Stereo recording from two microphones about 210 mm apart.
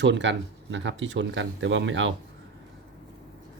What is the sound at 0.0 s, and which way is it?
Speech, 60° right (ahead or behind).